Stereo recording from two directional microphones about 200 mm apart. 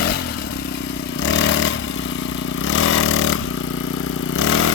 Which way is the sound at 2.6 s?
80° left.